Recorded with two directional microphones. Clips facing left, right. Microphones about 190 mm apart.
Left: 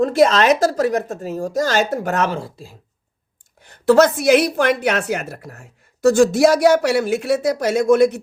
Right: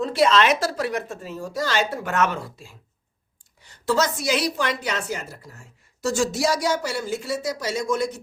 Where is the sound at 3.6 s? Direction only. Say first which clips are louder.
Left 10 dB; 55° left (ahead or behind).